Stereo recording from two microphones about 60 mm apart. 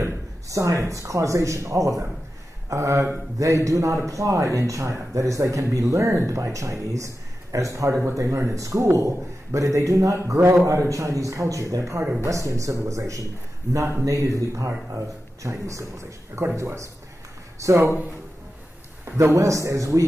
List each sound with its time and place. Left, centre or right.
0.0 s a man's voice: right
19.1 s a man's voice: right